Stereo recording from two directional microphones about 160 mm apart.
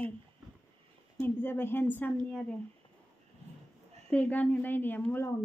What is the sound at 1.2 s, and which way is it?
A woman's voice, 15° left (ahead or behind).